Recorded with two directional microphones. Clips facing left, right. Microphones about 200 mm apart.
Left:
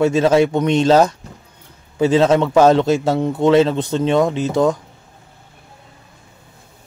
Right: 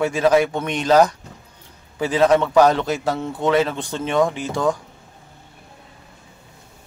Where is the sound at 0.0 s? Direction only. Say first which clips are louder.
Left 3 dB; 25° left (ahead or behind).